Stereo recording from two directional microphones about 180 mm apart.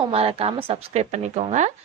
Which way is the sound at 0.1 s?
35° right (ahead or behind).